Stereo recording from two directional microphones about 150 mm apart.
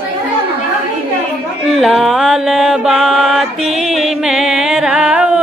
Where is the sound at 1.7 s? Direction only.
Centre (ahead or behind).